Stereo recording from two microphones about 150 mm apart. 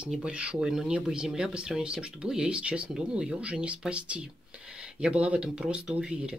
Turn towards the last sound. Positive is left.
turn(degrees=-5)  # may be behind; listen again after turning